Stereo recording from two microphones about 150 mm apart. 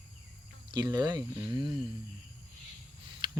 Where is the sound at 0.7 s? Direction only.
30° right (ahead or behind).